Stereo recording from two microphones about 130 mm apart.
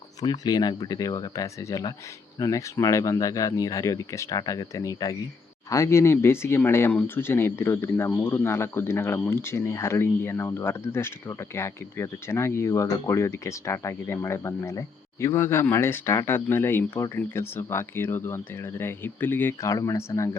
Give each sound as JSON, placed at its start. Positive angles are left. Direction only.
{"t": 0.2, "sound": "speech", "side_deg": 30}